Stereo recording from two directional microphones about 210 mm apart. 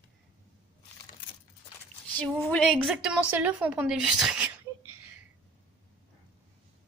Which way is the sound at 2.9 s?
5° right (ahead or behind).